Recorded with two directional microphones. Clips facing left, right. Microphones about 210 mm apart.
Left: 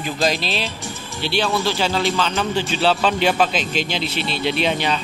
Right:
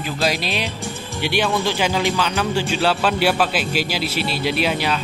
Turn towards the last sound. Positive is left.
turn(degrees=-5)  # may be behind; listen again after turning